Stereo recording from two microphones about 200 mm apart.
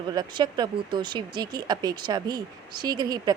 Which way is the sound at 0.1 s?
20° right (ahead or behind).